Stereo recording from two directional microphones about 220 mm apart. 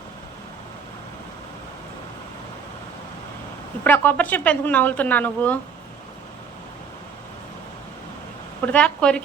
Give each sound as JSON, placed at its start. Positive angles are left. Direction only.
{"t": 3.8, "sound": "speech", "side_deg": 10}
{"t": 8.6, "sound": "a woman's voice", "side_deg": 5}